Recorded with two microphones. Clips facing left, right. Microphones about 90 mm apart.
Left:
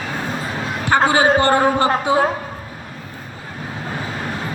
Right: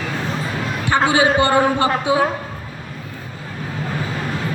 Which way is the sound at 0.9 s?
40° left (ahead or behind).